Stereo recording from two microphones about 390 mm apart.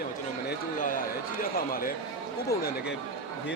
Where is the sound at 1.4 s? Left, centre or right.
Left.